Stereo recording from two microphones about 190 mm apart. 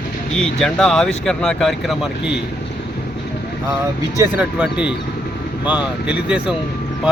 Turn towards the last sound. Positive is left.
turn(degrees=-5)  # may be behind; listen again after turning